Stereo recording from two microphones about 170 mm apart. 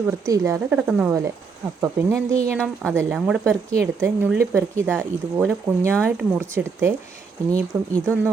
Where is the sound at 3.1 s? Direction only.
Centre (ahead or behind).